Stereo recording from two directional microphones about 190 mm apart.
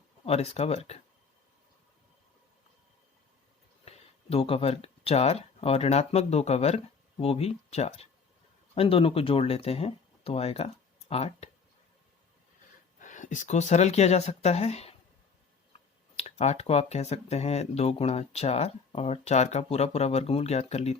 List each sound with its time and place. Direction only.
0.3 s speech: 35° left (ahead or behind)
3.8 s speech: 30° left (ahead or behind)
13.0 s speech: 40° left (ahead or behind)